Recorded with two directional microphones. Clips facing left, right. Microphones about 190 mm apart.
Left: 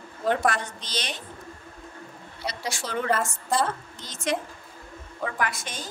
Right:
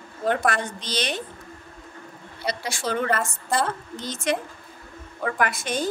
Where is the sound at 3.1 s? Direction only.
Centre (ahead or behind).